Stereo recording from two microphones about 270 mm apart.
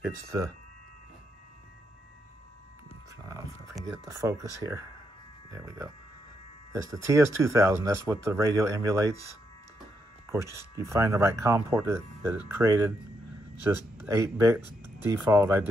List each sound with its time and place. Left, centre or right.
0.0 s speech: centre
4.0 s speech: centre
10.8 s speech: centre
14.0 s speech: centre
14.6 s speech: right
15.0 s speech: centre